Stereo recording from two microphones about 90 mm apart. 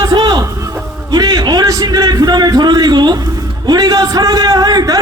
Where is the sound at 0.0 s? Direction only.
50° right (ahead or behind).